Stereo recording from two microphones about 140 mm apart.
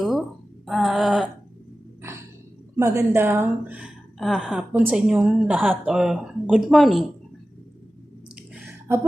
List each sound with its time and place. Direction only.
0.0 s a sound: centre (ahead or behind)
2.7 s a woman's voice: 20° right (ahead or behind)
4.2 s a woman's voice: centre (ahead or behind)